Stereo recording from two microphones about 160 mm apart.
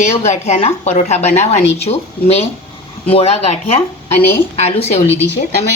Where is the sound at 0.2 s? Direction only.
45° left (ahead or behind).